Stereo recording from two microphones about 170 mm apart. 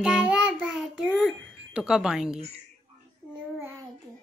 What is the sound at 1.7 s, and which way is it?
Speech, 5° right (ahead or behind).